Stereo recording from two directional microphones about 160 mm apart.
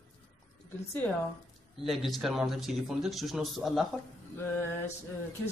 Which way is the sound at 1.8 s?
Centre (ahead or behind).